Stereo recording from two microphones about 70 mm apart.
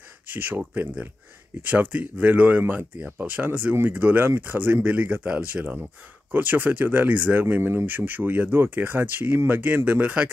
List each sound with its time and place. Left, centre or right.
0.3 s speech: right